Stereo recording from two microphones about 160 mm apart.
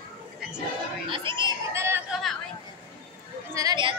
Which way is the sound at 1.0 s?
30° right (ahead or behind).